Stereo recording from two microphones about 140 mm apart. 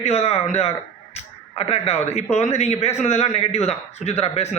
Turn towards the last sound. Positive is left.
turn(degrees=50)  # may be behind; listen again after turning